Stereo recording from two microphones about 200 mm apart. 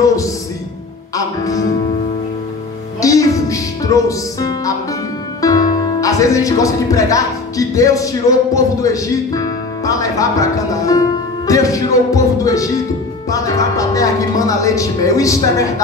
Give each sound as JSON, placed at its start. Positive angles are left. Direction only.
{"t": 0.0, "sound": "music", "side_deg": 15}
{"t": 1.1, "sound": "speech", "side_deg": 15}
{"t": 3.0, "sound": "music", "side_deg": 15}
{"t": 5.4, "sound": "speech", "side_deg": 20}